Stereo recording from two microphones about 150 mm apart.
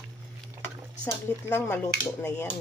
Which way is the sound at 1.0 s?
15° left (ahead or behind).